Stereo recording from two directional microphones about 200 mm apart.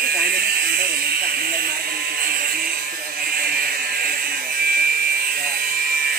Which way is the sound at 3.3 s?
50° right (ahead or behind).